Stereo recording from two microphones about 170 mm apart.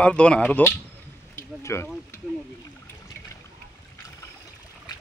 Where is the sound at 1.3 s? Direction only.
15° left (ahead or behind).